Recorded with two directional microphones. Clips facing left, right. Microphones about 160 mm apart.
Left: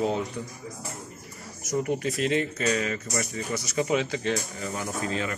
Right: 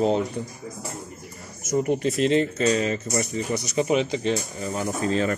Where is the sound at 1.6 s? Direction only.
25° right (ahead or behind).